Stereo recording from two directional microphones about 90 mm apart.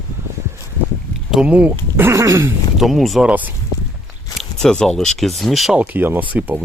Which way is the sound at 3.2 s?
15° right (ahead or behind).